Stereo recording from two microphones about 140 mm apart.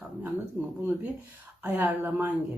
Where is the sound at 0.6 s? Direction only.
15° right (ahead or behind).